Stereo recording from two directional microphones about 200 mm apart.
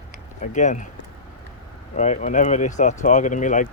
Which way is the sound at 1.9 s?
35° left (ahead or behind).